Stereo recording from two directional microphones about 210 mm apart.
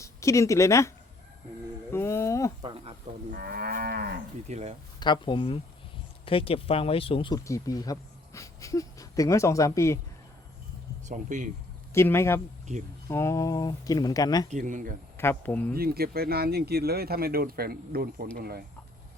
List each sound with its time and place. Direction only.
0.0 s speech: 15° left (ahead or behind)
1.9 s a sound: 10° left (ahead or behind)
2.6 s a sound: 25° right (ahead or behind)
3.3 s moo: 45° right (ahead or behind)
4.4 s speech: 35° right (ahead or behind)
4.9 s speech: 20° left (ahead or behind)
11.1 s speech: 35° right (ahead or behind)
11.9 s speech: 10° left (ahead or behind)
14.5 s speech: 35° right (ahead or behind)
15.2 s speech: 10° left (ahead or behind)
15.7 s speech: 45° right (ahead or behind)